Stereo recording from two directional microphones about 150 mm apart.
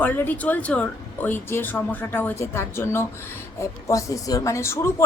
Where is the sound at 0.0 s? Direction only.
10° left (ahead or behind).